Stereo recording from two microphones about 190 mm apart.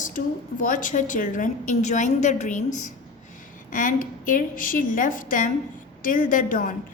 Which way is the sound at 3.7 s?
45° left (ahead or behind).